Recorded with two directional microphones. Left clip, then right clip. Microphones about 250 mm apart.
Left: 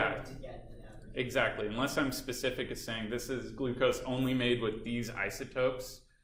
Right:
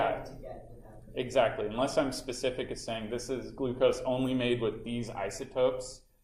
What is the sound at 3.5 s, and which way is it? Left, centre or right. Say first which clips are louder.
Speech: right 3 dB; left.